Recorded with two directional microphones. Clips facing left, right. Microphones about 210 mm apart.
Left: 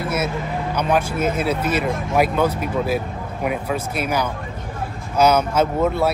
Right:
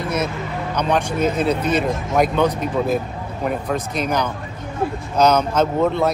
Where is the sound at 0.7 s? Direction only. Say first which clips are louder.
Right 1 dB; 5° left (ahead or behind).